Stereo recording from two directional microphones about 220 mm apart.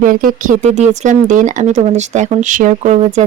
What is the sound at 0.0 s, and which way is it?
Speech, 40° right (ahead or behind).